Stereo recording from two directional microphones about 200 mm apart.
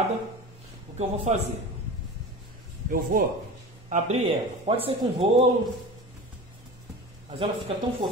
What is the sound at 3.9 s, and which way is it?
Speech, 35° right (ahead or behind).